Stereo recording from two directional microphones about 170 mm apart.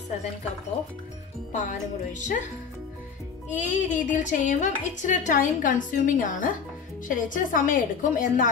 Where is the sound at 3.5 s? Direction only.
45° left (ahead or behind).